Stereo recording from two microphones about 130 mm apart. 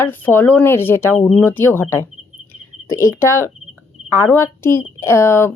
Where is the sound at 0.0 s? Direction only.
15° left (ahead or behind).